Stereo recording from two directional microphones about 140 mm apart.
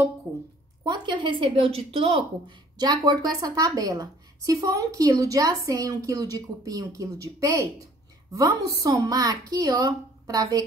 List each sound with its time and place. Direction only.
0.8 s a woman's voice: 35° right (ahead or behind)
2.8 s a woman's voice: 30° right (ahead or behind)